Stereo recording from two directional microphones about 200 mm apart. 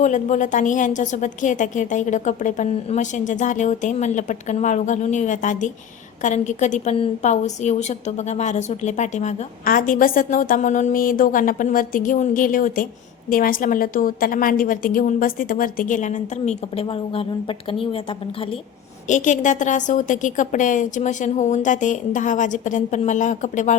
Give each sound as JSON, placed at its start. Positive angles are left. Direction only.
{"t": 0.0, "sound": "a woman's voice", "side_deg": 40}
{"t": 19.0, "sound": "a woman's voice", "side_deg": 40}